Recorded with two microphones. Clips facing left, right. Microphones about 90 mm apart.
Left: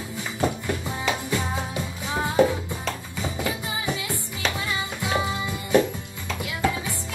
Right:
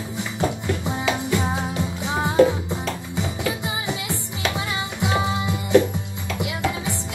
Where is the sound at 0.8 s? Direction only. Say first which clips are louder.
Right 3 dB; 20° right (ahead or behind).